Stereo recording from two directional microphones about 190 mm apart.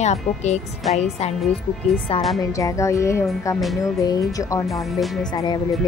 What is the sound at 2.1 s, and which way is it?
Speech, 30° left (ahead or behind).